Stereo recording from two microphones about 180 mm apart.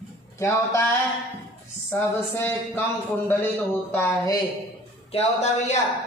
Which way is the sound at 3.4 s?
10° left (ahead or behind).